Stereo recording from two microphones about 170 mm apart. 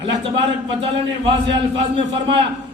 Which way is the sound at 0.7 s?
30° right (ahead or behind).